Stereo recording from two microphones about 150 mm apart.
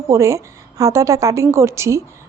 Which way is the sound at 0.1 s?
20° right (ahead or behind).